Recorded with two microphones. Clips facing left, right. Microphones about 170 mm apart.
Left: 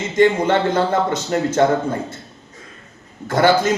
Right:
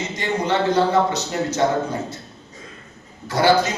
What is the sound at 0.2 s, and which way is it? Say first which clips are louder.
A man's voice: left 7 dB; 50° left (ahead or behind).